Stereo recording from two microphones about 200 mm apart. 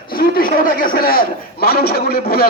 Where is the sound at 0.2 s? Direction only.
45° left (ahead or behind).